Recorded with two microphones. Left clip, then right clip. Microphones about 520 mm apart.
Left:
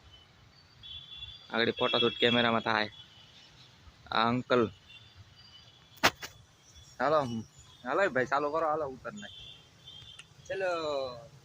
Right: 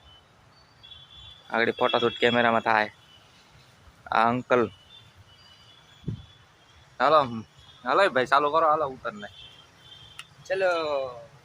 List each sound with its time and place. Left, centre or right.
1.5 s speech: left
4.1 s speech: left
6.9 s speech: left
10.5 s speech: left